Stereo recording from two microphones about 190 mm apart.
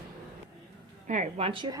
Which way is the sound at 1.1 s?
35° right (ahead or behind).